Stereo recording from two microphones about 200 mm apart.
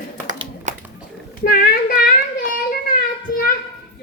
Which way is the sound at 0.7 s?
35° right (ahead or behind).